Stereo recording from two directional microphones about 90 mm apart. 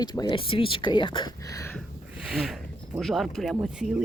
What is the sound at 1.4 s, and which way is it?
Speech, 40° left (ahead or behind).